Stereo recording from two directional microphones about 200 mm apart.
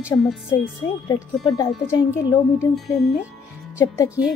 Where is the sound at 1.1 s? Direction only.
15° left (ahead or behind).